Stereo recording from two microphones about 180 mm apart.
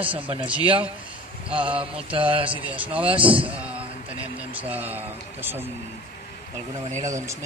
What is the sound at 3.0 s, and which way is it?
Speech, 30° right (ahead or behind).